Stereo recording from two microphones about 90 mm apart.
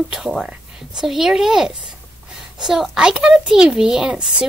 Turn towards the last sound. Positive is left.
turn(degrees=-10)  # may be behind; listen again after turning